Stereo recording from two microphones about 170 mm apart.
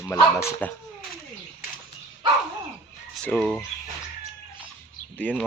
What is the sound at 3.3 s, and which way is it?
Speech, 10° left (ahead or behind).